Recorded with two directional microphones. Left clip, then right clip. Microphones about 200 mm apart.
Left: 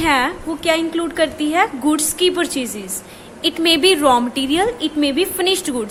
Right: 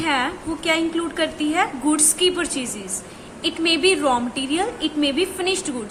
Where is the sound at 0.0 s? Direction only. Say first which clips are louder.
Left 5 dB; 35° left (ahead or behind).